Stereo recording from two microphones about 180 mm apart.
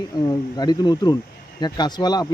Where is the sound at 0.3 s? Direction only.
20° left (ahead or behind).